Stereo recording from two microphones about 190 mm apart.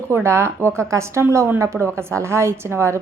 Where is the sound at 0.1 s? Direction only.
15° right (ahead or behind).